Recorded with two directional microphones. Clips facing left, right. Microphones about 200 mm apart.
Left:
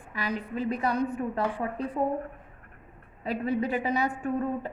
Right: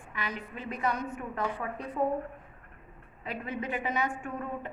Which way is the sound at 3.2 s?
35° left (ahead or behind).